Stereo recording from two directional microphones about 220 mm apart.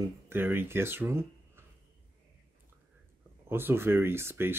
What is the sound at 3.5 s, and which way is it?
Speech, 10° right (ahead or behind).